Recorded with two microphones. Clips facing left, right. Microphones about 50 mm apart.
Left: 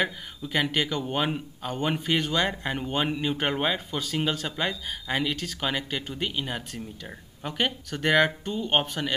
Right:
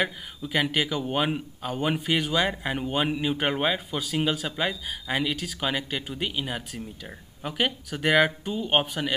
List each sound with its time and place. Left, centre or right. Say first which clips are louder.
0.0 s speech: even; centre